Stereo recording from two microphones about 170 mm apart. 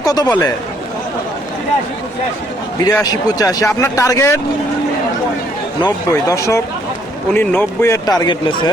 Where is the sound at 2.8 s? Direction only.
20° left (ahead or behind).